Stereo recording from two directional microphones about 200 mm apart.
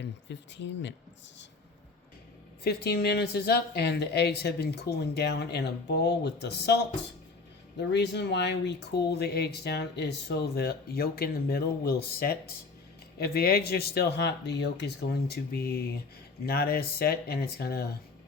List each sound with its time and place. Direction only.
0.0 s speech: 60° left (ahead or behind)
2.6 s speech: 55° left (ahead or behind)
7.8 s speech: 60° left (ahead or behind)